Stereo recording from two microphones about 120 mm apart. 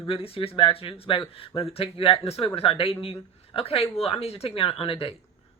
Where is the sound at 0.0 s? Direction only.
50° left (ahead or behind).